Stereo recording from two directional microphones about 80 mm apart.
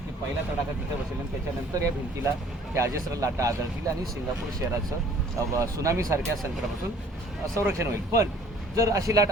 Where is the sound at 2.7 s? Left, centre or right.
Right.